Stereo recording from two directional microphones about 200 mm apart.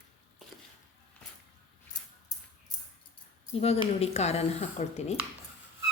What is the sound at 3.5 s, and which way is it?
A woman's voice, 30° left (ahead or behind).